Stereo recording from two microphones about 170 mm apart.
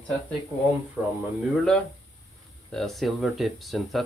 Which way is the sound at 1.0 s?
10° right (ahead or behind).